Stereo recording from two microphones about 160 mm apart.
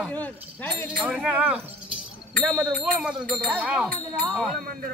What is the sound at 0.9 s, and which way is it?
Speech, 5° right (ahead or behind).